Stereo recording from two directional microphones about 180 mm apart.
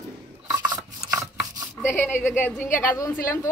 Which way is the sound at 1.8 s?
15° left (ahead or behind).